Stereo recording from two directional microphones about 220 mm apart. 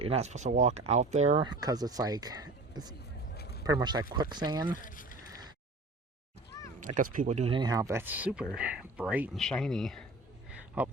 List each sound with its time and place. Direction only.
0.0 s speech: 30° right (ahead or behind)
1.6 s speech: 15° right (ahead or behind)
3.3 s a sound: 45° left (ahead or behind)
3.6 s speech: 15° right (ahead or behind)
4.7 s speech: 40° left (ahead or behind)
6.7 s speech: 35° right (ahead or behind); by 10.9 s 5° right (ahead or behind)